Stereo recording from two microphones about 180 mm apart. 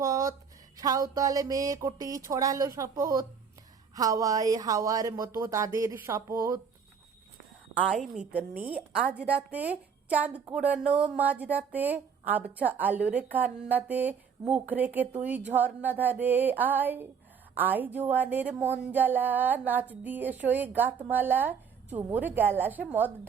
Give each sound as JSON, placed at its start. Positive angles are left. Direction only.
{"t": 0.0, "sound": "a sound", "side_deg": -20}
{"t": 0.8, "sound": "a woman's voice", "side_deg": -20}
{"t": 7.9, "sound": "speech", "side_deg": -5}